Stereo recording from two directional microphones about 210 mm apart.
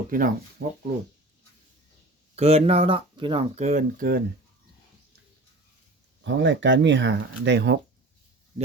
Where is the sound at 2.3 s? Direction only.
30° right (ahead or behind).